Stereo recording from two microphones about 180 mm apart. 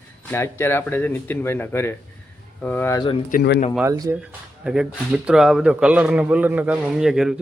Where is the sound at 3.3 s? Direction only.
60° left (ahead or behind).